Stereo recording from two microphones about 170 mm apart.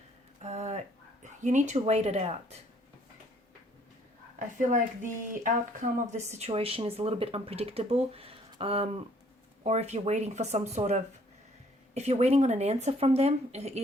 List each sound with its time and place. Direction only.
0.4 s a sound: 40° right (ahead or behind)
1.2 s speech: 45° right (ahead or behind)
5.3 s speech: 45° right (ahead or behind)